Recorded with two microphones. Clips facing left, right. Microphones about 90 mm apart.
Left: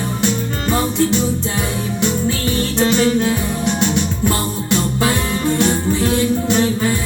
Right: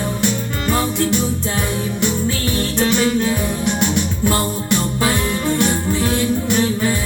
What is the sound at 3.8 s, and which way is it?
Music, 15° right (ahead or behind).